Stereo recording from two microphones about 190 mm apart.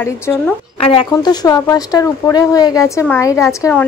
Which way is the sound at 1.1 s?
20° left (ahead or behind).